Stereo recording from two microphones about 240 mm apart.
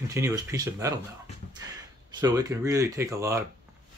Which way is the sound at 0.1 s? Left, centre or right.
Centre.